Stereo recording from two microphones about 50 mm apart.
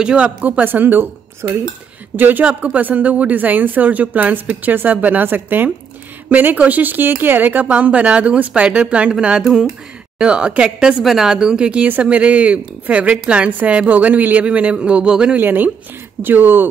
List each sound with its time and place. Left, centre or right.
0.0 s speech: centre
0.4 s a woman's voice: right
2.1 s a woman's voice: right
7.7 s speech: right
10.1 s speech: centre
15.3 s a woman's voice: right